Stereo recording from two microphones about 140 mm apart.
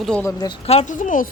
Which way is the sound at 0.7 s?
50° left (ahead or behind).